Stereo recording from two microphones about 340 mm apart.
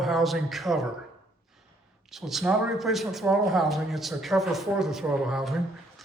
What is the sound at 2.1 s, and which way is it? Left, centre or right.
A man's voice, centre.